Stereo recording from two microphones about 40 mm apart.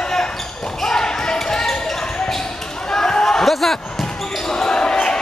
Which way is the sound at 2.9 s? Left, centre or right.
Centre.